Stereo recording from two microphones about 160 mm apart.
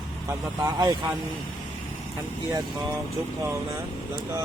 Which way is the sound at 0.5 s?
25° right (ahead or behind).